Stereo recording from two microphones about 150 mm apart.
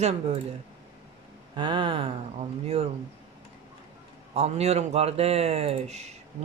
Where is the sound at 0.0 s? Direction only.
45° right (ahead or behind).